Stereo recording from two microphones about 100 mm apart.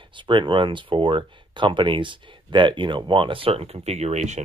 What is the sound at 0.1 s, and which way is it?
Speech, 55° right (ahead or behind).